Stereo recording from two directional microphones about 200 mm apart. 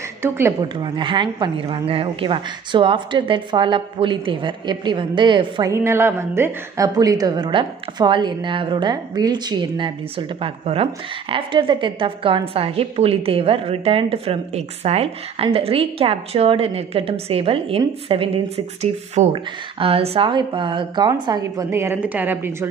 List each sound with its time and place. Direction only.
0.2 s a woman's voice: 15° right (ahead or behind)